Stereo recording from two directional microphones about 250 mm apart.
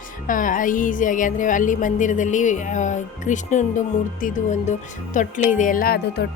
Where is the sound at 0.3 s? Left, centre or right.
Left.